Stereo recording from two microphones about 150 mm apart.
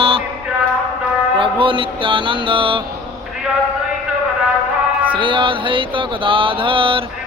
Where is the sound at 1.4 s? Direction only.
35° right (ahead or behind).